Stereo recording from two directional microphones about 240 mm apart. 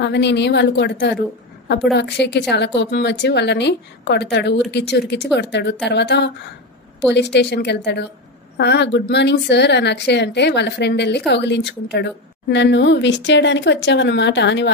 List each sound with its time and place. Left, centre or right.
0.0 s a woman's voice: left